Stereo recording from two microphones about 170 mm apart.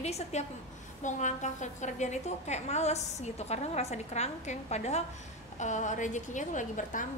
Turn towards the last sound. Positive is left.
turn(degrees=50)  # may be behind; listen again after turning